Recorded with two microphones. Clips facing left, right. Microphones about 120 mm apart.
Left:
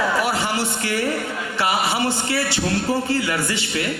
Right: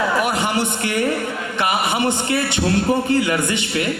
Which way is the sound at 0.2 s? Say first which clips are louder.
Right 2 dB; 20° right (ahead or behind).